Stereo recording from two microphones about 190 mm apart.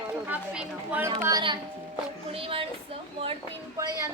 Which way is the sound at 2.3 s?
30° right (ahead or behind).